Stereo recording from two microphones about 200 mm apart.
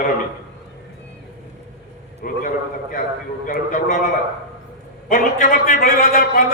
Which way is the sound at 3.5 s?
40° left (ahead or behind).